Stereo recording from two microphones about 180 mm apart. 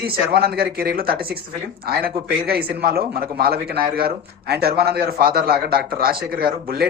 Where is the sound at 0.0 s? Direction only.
60° right (ahead or behind).